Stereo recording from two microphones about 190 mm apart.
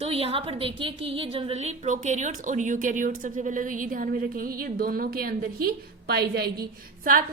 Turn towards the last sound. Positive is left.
turn(degrees=-50)  # may be behind; listen again after turning